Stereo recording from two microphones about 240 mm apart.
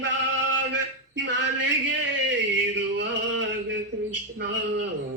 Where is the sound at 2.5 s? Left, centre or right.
Right.